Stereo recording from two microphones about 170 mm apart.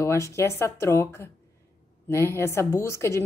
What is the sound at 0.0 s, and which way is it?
A woman's voice, 15° left (ahead or behind).